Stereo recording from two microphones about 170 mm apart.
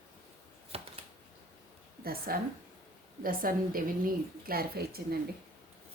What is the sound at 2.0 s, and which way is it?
A woman's voice, 60° right (ahead or behind).